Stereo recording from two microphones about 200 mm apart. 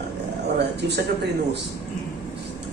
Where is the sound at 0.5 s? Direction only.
55° right (ahead or behind).